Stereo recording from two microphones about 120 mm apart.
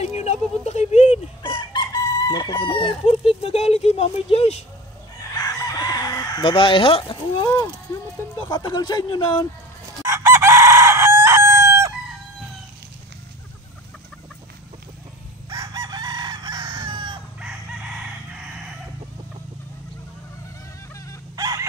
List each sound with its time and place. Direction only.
0.0 s a sound: 65° left (ahead or behind)
1.4 s chicken: 40° left (ahead or behind); by 4.6 s 60° left (ahead or behind)
5.4 s chicken: 30° left (ahead or behind)
6.4 s speech: 45° left (ahead or behind)
10.0 s chicken: 20° right (ahead or behind)
15.5 s chicken: 30° right (ahead or behind)
17.4 s chicken: 10° right (ahead or behind)
21.4 s chicken: 30° right (ahead or behind)